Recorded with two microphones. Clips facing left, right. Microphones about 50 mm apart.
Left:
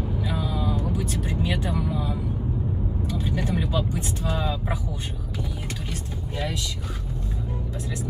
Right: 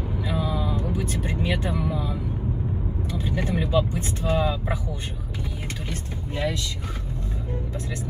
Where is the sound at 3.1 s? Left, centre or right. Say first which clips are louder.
Right 1 dB; right.